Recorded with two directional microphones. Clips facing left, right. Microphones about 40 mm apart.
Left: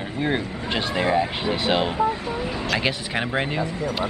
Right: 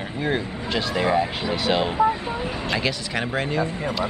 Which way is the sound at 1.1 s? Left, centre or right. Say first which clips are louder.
Even; centre.